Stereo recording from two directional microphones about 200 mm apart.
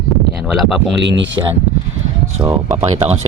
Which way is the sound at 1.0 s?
65° right (ahead or behind).